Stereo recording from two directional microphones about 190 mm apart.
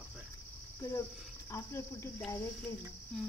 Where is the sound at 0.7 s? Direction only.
15° left (ahead or behind).